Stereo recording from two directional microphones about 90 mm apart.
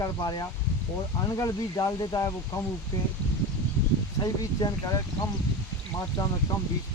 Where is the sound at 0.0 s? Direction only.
50° left (ahead or behind).